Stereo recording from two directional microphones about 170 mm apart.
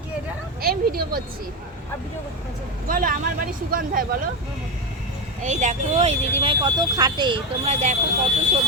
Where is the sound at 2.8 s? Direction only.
55° right (ahead or behind).